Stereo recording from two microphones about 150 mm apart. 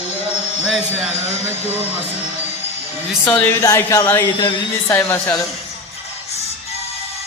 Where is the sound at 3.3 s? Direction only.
15° left (ahead or behind).